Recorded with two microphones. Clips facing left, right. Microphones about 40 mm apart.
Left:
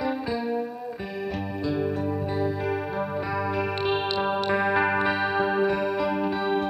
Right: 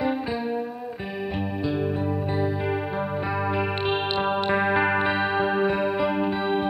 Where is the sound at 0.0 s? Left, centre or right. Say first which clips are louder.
Right 1 dB; right.